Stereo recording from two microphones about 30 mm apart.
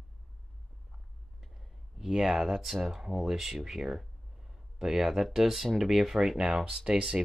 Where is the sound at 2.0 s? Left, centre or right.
Centre.